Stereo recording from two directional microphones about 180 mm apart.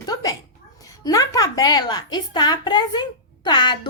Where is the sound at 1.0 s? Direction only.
20° left (ahead or behind).